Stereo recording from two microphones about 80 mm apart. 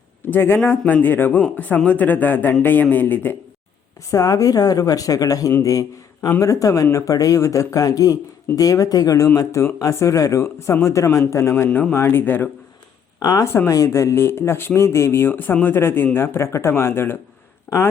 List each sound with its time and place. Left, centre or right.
0.3 s a man's voice: left
4.1 s speech: left
11.7 s a man's voice: left
13.1 s a man's voice: left
17.7 s speech: centre